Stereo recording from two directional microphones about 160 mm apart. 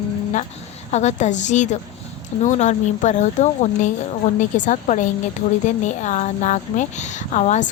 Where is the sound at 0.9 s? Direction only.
45° left (ahead or behind).